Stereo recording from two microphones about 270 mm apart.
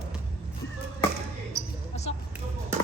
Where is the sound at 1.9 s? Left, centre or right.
Left.